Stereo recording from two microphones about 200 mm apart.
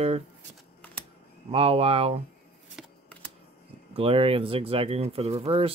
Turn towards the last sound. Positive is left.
turn(degrees=-30)  # may be behind; listen again after turning